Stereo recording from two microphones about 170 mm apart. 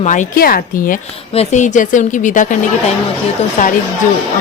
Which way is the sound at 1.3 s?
45° left (ahead or behind).